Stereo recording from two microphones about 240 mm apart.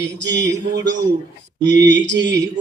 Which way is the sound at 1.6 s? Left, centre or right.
Right.